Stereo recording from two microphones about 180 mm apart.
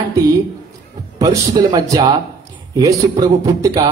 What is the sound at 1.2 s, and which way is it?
A man's voice, 20° right (ahead or behind).